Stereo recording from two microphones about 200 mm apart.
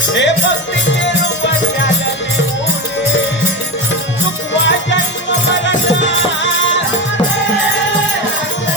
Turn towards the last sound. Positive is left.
turn(degrees=65)  # may be behind; listen again after turning